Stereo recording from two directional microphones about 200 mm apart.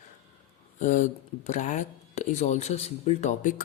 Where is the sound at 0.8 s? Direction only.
35° left (ahead or behind).